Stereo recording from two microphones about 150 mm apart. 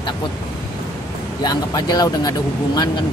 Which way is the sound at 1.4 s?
25° left (ahead or behind).